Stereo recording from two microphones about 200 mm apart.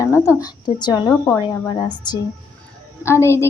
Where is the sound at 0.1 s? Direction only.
15° left (ahead or behind).